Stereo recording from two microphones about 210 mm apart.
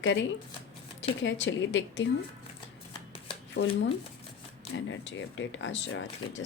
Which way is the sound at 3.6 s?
55° left (ahead or behind).